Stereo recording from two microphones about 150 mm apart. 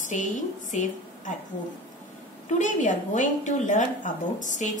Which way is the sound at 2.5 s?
55° left (ahead or behind).